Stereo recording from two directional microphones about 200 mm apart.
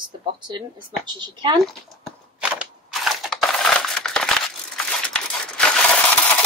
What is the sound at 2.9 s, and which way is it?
Crushing, centre (ahead or behind).